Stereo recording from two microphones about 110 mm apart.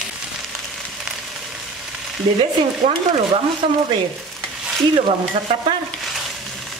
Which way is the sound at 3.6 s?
55° right (ahead or behind).